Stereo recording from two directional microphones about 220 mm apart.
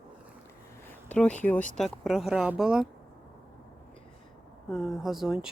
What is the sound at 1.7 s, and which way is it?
Speech, centre (ahead or behind).